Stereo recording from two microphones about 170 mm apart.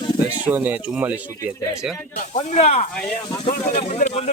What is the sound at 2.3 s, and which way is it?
Speech, 40° left (ahead or behind).